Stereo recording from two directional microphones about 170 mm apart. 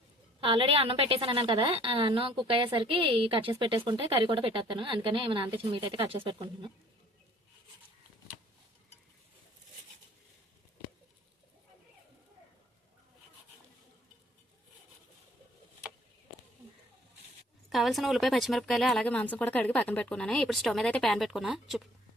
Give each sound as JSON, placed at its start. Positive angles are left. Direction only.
{"t": 0.3, "sound": "a woman's voice", "side_deg": -30}
{"t": 17.7, "sound": "speech", "side_deg": 0}